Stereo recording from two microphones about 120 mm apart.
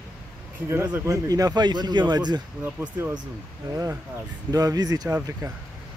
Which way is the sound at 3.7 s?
30° right (ahead or behind).